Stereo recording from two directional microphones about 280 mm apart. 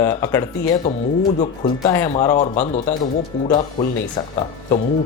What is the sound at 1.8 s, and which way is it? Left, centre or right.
Speech, centre.